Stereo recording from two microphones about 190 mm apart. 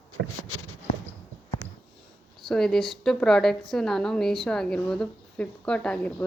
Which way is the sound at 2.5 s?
Centre (ahead or behind).